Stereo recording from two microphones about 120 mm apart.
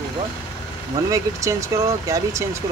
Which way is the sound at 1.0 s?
25° right (ahead or behind).